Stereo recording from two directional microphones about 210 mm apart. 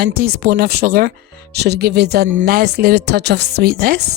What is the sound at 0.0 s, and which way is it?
Speech, 45° right (ahead or behind).